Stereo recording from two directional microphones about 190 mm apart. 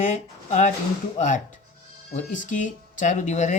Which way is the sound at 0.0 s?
40° left (ahead or behind).